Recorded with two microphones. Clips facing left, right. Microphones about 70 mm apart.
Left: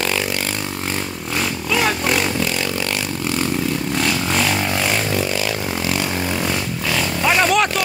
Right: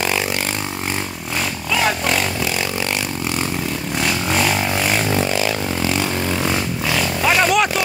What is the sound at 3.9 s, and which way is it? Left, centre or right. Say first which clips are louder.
Vehicle: right 2 dB; centre.